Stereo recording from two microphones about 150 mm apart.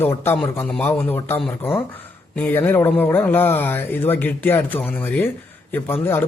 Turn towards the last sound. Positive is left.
turn(degrees=15)  # may be behind; listen again after turning